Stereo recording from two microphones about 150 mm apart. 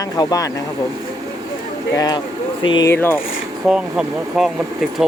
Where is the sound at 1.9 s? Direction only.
25° left (ahead or behind).